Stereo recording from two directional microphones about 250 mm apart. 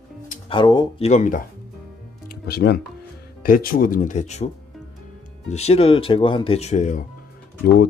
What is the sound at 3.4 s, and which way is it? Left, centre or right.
Speech, left.